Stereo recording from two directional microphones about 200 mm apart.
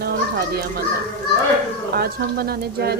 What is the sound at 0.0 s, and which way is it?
Children playing, 50° right (ahead or behind).